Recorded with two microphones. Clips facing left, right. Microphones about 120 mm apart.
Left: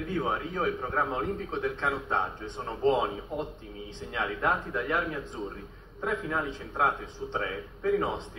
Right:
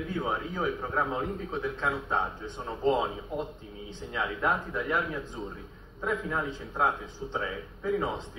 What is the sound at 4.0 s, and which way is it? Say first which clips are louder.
A man's voice: even; 5° right (ahead or behind).